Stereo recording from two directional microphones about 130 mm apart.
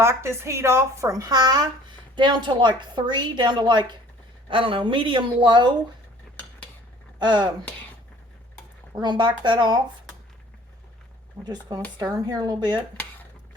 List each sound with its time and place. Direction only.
0.0 s a woman's voice: 20° right (ahead or behind); by 5.7 s 35° right (ahead or behind)
7.2 s a woman's voice: 35° right (ahead or behind)
8.9 s a woman's voice: 35° right (ahead or behind)
11.9 s a woman's voice: 30° right (ahead or behind)